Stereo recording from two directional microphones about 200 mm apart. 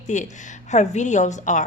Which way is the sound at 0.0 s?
35° left (ahead or behind).